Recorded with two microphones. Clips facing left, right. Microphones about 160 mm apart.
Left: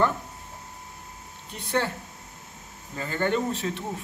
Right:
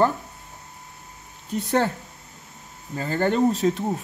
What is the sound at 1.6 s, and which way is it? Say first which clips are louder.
Speech: right 5 dB; 40° right (ahead or behind).